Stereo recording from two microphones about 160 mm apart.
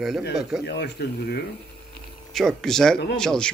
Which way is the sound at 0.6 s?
85° left.